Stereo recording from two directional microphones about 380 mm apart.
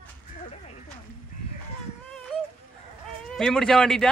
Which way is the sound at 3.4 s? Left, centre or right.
Centre.